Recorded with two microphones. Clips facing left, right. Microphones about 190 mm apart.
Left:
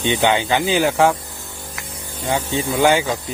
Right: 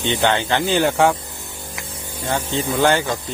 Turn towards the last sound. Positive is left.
turn(degrees=10)  # may be behind; listen again after turning